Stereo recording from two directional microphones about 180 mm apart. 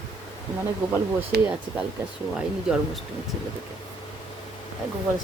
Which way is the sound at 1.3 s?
60° right (ahead or behind).